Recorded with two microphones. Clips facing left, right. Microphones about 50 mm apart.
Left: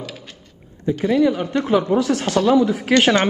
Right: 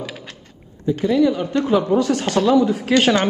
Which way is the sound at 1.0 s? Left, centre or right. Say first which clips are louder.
Even; left.